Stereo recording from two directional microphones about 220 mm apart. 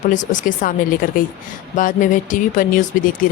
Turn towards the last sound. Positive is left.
turn(degrees=35)  # may be behind; listen again after turning